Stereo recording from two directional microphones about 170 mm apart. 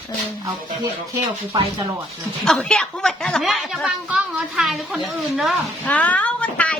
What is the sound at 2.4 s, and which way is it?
Speech, 5° left (ahead or behind).